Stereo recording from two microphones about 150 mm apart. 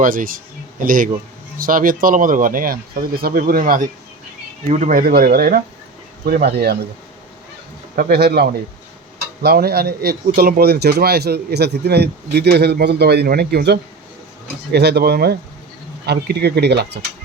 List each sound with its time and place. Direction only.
0.0 s speech: 65° right (ahead or behind); by 6.7 s 90° right
7.9 s speech: 85° right